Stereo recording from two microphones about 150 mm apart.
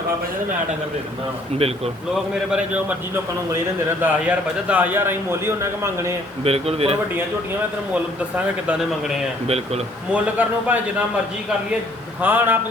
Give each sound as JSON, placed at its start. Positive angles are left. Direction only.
{"t": 1.5, "sound": "speech", "side_deg": -40}
{"t": 4.0, "sound": "a man's voice", "side_deg": -10}
{"t": 6.4, "sound": "speech", "side_deg": -40}
{"t": 7.9, "sound": "a man's voice", "side_deg": -10}
{"t": 12.2, "sound": "a man's voice", "side_deg": -10}